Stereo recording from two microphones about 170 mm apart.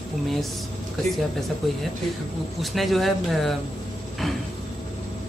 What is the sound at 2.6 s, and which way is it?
Speech, centre (ahead or behind).